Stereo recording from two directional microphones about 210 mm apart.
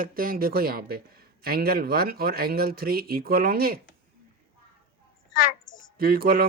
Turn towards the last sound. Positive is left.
turn(degrees=-45)  # may be behind; listen again after turning